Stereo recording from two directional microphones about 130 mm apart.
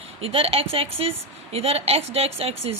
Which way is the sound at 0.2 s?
45° right (ahead or behind).